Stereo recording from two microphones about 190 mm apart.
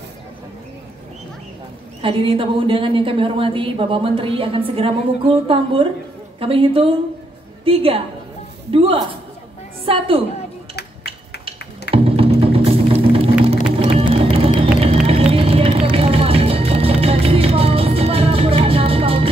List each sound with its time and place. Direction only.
2.0 s a woman's voice: 25° right (ahead or behind)
10.8 s a sound: 60° left (ahead or behind)
11.9 s music: 30° right (ahead or behind)
14.3 s vehicle: 30° right (ahead or behind)
15.9 s music: 30° right (ahead or behind)